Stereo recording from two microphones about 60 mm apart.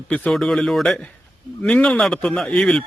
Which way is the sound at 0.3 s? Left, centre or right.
Centre.